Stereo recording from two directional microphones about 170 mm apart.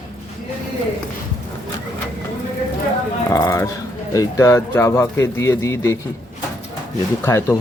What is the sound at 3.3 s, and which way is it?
Speech, 20° left (ahead or behind).